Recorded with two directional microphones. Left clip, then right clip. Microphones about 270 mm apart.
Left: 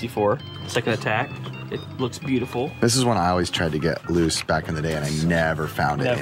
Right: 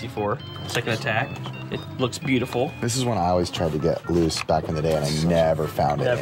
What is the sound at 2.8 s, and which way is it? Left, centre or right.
Speech, centre.